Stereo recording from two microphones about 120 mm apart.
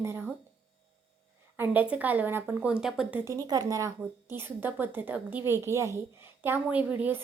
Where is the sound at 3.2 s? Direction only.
30° right (ahead or behind).